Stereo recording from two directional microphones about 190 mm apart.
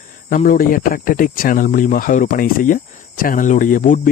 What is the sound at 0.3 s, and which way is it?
Speech, 45° left (ahead or behind).